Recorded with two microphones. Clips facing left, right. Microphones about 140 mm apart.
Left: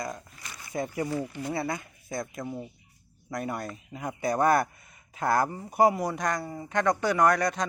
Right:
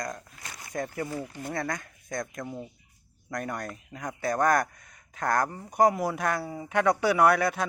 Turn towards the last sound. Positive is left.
turn(degrees=-5)  # may be behind; listen again after turning